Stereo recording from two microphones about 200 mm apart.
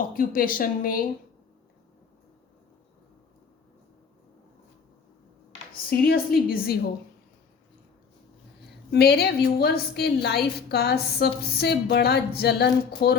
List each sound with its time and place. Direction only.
0.1 s a woman's voice: 45° left (ahead or behind)
6.1 s a woman's voice: 50° left (ahead or behind)
8.9 s a woman's voice: 55° left (ahead or behind)